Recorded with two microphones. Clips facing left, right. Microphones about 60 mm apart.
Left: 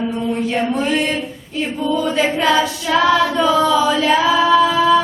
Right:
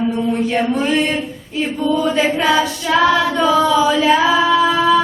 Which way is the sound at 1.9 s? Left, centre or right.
Centre.